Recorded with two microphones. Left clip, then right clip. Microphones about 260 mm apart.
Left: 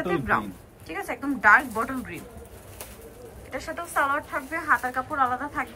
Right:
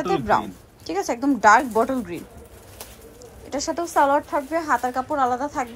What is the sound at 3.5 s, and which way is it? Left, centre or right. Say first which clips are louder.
Speech: right 7 dB; centre.